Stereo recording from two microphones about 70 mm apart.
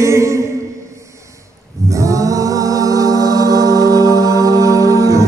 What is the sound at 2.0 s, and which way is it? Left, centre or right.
Music, right.